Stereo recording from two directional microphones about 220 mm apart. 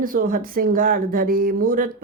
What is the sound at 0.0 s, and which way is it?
A woman's voice, 40° right (ahead or behind).